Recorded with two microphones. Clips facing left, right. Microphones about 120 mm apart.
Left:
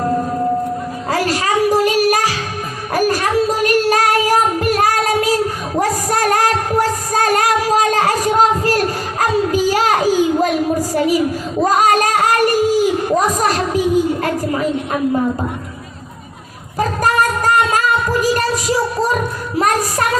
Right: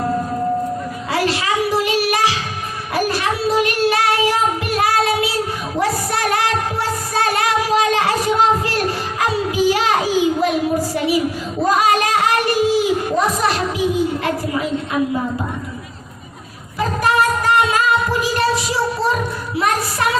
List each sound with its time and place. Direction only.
1.1 s child singing: 45° left (ahead or behind)
5.8 s music: 45° left (ahead or behind)
9.2 s a sound: 45° left (ahead or behind)
11.8 s singing: 45° left (ahead or behind)
13.3 s a sound: 45° left (ahead or behind)
16.7 s singing: 45° left (ahead or behind)
19.5 s music: 45° left (ahead or behind)